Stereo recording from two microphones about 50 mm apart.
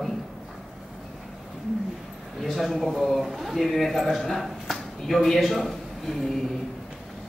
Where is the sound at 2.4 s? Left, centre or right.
Centre.